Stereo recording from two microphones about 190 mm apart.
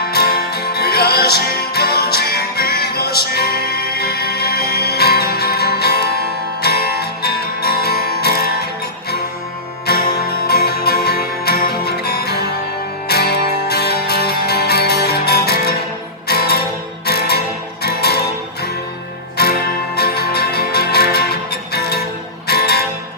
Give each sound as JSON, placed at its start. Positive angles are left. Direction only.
{"t": 0.1, "sound": "music", "side_deg": 55}
{"t": 9.9, "sound": "music", "side_deg": 55}
{"t": 19.4, "sound": "music", "side_deg": 55}